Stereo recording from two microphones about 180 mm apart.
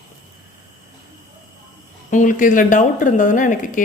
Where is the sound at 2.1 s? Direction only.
45° left (ahead or behind).